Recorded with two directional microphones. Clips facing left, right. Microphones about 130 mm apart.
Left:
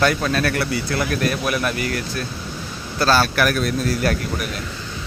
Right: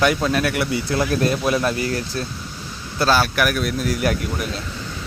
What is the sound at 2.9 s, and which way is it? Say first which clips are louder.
Speech: left 1 dB; 15° right (ahead or behind).